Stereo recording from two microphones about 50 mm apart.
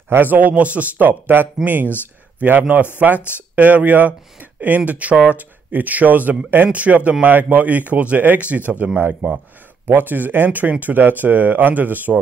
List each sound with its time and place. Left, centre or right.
0.1 s speech: right
9.8 s speech: right